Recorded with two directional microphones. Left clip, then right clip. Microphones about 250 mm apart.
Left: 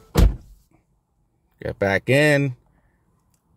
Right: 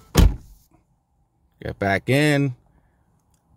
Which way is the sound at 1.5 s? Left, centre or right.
Centre.